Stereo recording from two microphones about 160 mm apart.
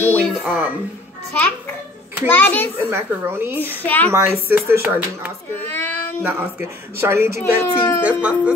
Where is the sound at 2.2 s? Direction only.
10° left (ahead or behind).